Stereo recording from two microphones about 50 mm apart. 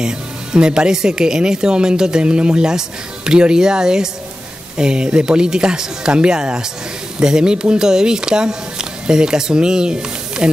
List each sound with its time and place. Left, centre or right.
0.0 s speech: centre